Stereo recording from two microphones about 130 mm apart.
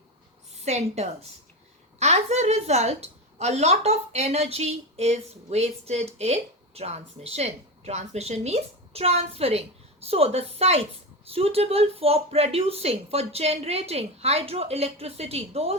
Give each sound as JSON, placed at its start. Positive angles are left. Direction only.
{"t": 0.5, "sound": "a woman's voice", "side_deg": -55}